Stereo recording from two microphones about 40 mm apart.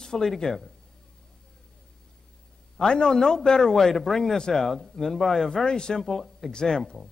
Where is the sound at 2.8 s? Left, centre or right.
Centre.